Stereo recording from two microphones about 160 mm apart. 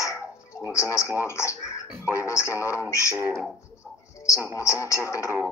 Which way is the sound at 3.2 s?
15° right (ahead or behind).